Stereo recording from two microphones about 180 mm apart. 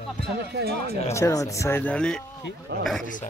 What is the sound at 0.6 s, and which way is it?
Speech, 60° right (ahead or behind).